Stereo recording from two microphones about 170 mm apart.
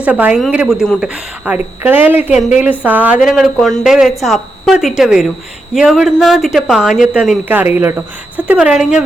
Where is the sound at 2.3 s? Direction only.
45° left (ahead or behind).